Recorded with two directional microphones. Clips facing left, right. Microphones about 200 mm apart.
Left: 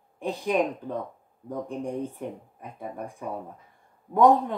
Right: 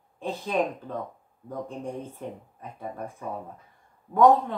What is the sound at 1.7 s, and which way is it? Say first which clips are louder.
Speech: left 4 dB; 15° left (ahead or behind).